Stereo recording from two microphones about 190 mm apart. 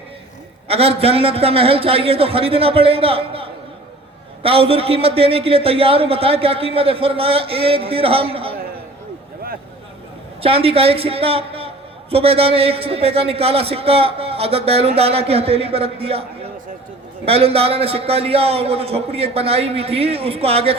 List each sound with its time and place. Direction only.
0.7 s a man's voice: 30° right (ahead or behind)
10.4 s a man's voice: 30° right (ahead or behind)